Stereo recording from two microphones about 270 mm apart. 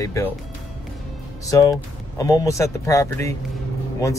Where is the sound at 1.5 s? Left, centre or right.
Centre.